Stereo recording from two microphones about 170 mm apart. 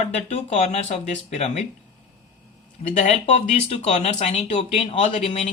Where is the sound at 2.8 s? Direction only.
45° left (ahead or behind).